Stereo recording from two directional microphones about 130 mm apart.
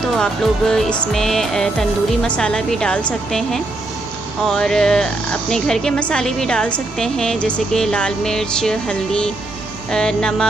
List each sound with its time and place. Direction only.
0.1 s speech: 5° left (ahead or behind)